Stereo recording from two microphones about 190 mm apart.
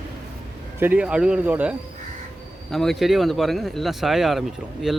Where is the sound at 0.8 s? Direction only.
5° right (ahead or behind).